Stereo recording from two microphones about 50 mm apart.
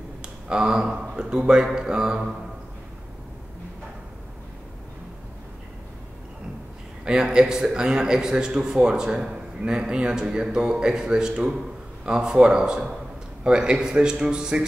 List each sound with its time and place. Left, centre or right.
0.2 s speech: centre
7.1 s a man's voice: centre